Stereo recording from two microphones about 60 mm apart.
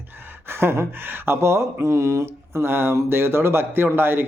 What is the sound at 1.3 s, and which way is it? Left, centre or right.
A man's voice, right.